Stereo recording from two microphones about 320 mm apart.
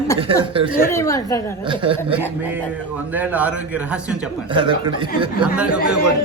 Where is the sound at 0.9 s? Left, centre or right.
Centre.